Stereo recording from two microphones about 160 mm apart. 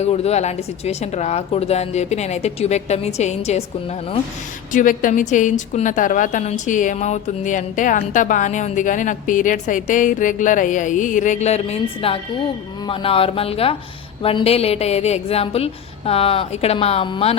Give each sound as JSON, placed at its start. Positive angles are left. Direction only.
{"t": 0.0, "sound": "a woman's voice", "side_deg": 40}
{"t": 4.7, "sound": "a woman's voice", "side_deg": 55}